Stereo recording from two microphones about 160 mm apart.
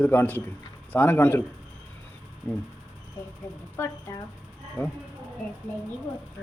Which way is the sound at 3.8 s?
15° left (ahead or behind).